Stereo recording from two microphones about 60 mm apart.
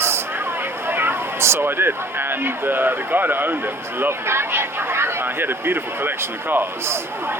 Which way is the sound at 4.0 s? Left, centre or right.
Right.